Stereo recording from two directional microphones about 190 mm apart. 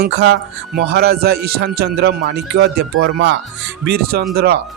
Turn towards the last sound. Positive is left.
turn(degrees=-55)  # may be behind; listen again after turning